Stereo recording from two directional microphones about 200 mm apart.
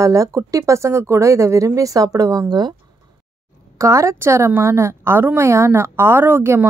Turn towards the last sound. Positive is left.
turn(degrees=-10)  # may be behind; listen again after turning